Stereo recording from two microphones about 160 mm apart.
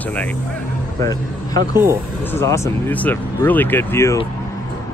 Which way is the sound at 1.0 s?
25° left (ahead or behind).